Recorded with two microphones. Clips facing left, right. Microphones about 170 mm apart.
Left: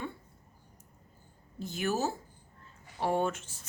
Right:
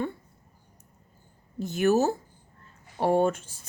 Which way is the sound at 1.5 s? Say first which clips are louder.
Right 9 dB; 50° right (ahead or behind).